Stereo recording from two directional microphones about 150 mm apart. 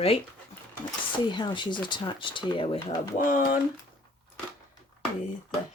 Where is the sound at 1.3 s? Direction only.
30° left (ahead or behind).